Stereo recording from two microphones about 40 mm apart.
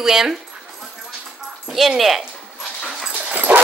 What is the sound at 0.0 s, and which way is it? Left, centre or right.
Speech, centre.